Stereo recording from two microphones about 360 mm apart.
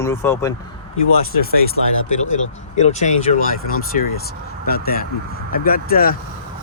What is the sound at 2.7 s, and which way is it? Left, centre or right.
Speech, centre.